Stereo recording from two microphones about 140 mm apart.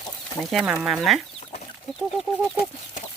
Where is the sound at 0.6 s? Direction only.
5° right (ahead or behind).